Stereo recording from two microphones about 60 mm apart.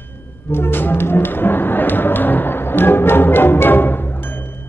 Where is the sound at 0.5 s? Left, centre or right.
Left.